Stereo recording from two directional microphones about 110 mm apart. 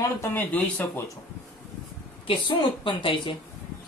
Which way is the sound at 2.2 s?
50° left (ahead or behind).